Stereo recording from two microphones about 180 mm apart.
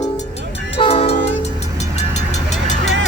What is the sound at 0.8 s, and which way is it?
Train, 35° left (ahead or behind).